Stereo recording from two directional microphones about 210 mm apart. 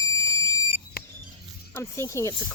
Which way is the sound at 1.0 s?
45° left (ahead or behind).